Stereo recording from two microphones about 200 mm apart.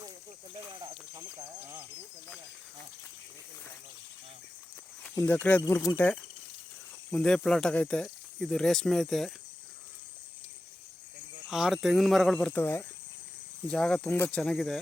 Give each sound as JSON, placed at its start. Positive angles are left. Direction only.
{"t": 0.5, "sound": "a sound", "side_deg": -25}
{"t": 5.1, "sound": "speech", "side_deg": 10}
{"t": 11.4, "sound": "speech", "side_deg": 0}